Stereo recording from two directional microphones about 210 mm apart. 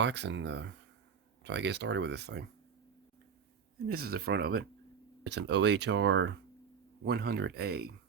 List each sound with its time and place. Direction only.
0.0 s speech: 55° right (ahead or behind)
3.8 s speech: 45° right (ahead or behind); by 6.3 s 60° right (ahead or behind)
7.0 s speech: 50° right (ahead or behind)